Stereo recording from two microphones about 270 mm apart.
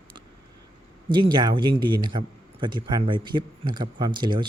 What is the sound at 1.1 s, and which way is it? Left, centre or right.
Speech, centre.